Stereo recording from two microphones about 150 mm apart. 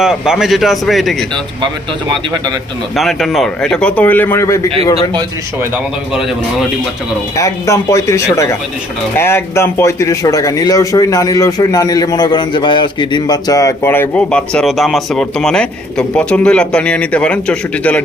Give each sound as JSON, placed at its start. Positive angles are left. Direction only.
{"t": 0.0, "sound": "a man's voice", "side_deg": -5}
{"t": 2.3, "sound": "speech", "side_deg": -30}
{"t": 2.9, "sound": "speech", "side_deg": 0}
{"t": 7.3, "sound": "speech", "side_deg": 20}